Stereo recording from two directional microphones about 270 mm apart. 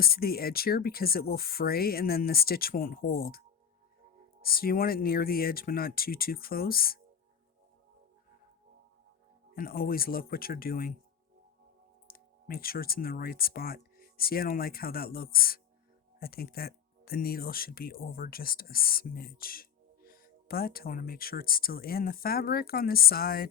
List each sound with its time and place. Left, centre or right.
0.0 s speech: left
4.4 s speech: left
9.6 s speech: left
12.0 s speech: left